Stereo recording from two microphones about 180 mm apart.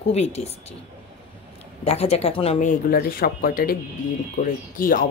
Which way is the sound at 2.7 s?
55° left (ahead or behind).